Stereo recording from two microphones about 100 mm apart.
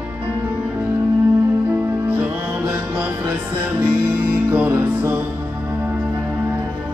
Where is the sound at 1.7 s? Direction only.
15° right (ahead or behind).